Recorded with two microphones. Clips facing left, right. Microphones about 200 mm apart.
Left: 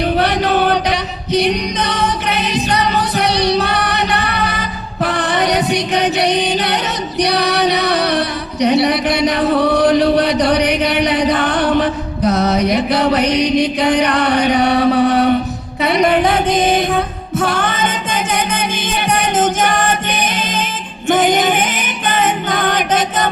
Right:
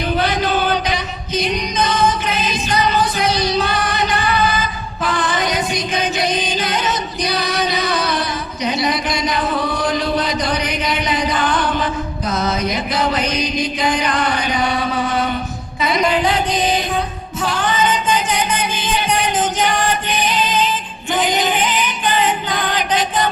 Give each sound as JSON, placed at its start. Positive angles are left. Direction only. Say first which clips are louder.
{"t": 0.2, "sound": "singing", "louder": "left 2 dB", "side_deg": 65}
{"t": 2.6, "sound": "music", "louder": "left 1 dB", "side_deg": 65}